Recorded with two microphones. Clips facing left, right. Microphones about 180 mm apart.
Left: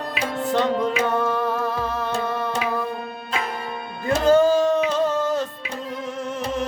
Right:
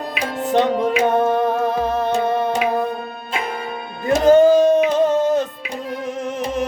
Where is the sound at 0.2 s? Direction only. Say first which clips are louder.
Right 4 dB; 20° right (ahead or behind).